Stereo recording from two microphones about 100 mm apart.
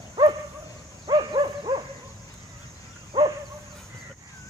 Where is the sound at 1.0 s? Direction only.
50° right (ahead or behind).